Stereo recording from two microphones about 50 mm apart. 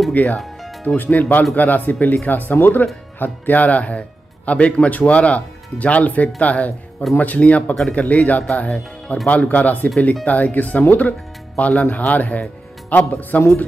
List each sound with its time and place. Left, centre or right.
0.1 s speech: left
2.5 s speech: left
3.2 s speech: left